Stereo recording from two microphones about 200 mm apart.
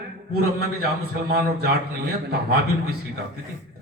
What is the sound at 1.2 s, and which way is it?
A man's voice, 50° right (ahead or behind).